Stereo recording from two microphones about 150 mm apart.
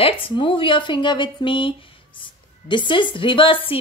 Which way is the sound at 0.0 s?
35° left (ahead or behind).